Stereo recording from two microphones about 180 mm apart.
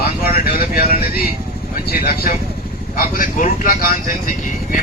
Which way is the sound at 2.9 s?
50° left (ahead or behind).